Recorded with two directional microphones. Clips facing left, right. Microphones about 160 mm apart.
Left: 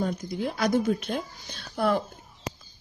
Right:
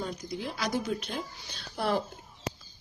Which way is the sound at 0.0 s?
50° left (ahead or behind).